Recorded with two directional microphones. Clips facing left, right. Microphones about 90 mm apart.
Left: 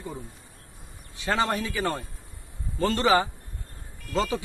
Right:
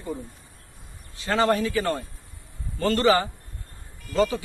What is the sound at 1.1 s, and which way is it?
Speech, 15° left (ahead or behind).